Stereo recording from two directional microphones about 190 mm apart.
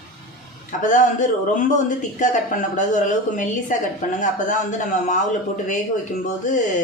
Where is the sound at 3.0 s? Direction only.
40° left (ahead or behind).